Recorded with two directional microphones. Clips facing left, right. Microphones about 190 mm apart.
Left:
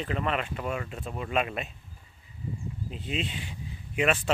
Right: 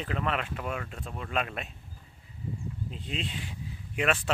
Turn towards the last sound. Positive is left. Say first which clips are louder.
# left 2 dB
turn(degrees=0)  # may be behind; listen again after turning